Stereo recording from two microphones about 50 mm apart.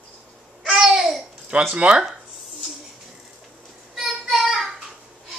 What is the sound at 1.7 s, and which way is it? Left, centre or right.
Speech, right.